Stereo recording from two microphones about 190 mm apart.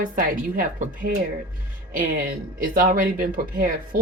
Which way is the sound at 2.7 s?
45° right (ahead or behind).